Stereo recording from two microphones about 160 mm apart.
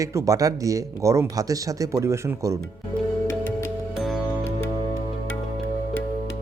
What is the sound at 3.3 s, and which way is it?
Music, 15° left (ahead or behind).